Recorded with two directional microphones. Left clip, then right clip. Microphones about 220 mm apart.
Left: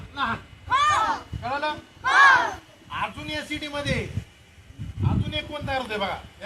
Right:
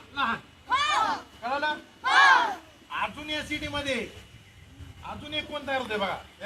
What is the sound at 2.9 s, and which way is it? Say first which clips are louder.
A man's voice: left 1 dB; 5° left (ahead or behind).